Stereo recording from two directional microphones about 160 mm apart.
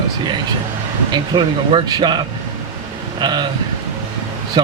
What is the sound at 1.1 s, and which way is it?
Speech, 25° right (ahead or behind).